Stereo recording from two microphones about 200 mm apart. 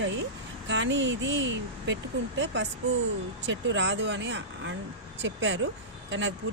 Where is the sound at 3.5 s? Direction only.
65° right (ahead or behind).